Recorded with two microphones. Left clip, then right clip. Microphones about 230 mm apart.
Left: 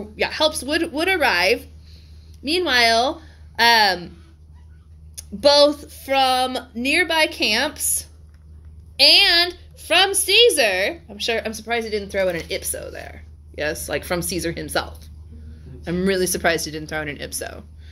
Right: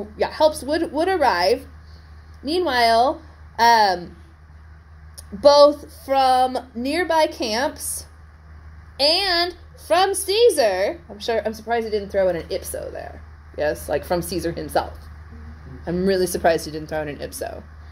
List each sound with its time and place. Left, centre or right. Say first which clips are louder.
0.2 s a woman's voice: right 2 dB; left
5.1 s a woman's voice: right 2 dB; left
7.7 s a woman's voice: left 5 dB; left
8.9 s a woman's voice: left 5 dB; left